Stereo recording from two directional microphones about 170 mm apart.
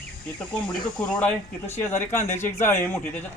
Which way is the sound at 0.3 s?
10° left (ahead or behind).